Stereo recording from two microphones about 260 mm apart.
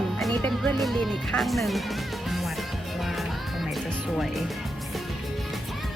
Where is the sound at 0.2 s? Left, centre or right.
Centre.